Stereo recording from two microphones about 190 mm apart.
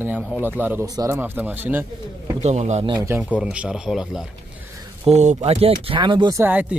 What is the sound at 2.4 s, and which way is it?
Speech, 35° right (ahead or behind).